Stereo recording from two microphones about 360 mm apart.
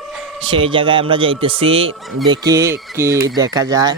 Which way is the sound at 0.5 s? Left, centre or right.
Centre.